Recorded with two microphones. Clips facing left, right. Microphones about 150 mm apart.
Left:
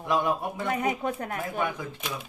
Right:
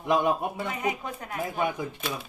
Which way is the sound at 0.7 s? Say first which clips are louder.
Left 3 dB; 55° left (ahead or behind).